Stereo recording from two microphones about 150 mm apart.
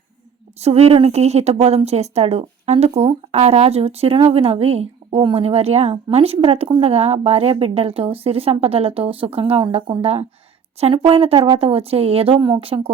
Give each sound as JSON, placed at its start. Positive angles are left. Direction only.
{"t": 0.6, "sound": "a woman's voice", "side_deg": -45}